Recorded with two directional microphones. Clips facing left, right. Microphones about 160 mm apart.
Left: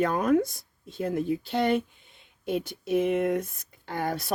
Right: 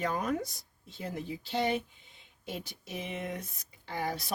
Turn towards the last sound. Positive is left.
turn(degrees=55)  # may be behind; listen again after turning